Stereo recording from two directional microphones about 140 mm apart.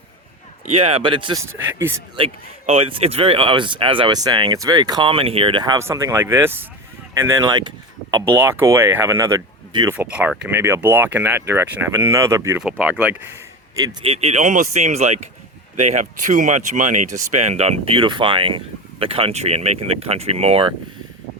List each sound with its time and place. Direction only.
0.6 s speech: 45° right (ahead or behind)
1.6 s speech: 15° right (ahead or behind)
2.1 s speech: 45° right (ahead or behind)
5.8 s speech: 20° right (ahead or behind)
9.9 s speech: 10° right (ahead or behind)
12.8 s speech: 10° right (ahead or behind)
14.0 s speech: 45° right (ahead or behind)